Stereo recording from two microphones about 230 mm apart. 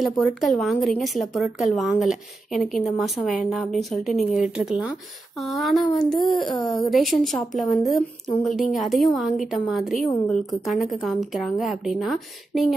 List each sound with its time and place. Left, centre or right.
0.0 s speech: centre